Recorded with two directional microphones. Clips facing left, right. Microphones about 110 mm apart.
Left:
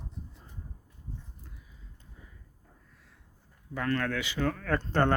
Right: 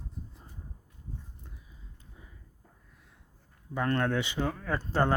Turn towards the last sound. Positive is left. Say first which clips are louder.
# left 2 dB
turn(degrees=-10)  # may be behind; listen again after turning